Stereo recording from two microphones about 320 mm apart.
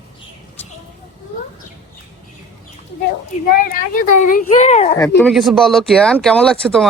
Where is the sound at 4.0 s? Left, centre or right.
Left.